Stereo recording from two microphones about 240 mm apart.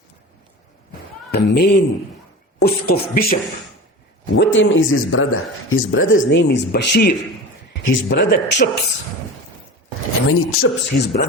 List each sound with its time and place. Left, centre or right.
1.3 s speech: left
4.4 s speech: left
10.2 s speech: left